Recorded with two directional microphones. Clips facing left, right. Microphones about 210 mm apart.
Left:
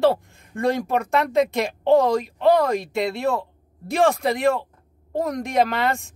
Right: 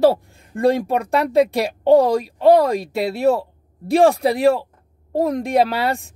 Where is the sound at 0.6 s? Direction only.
35° right (ahead or behind).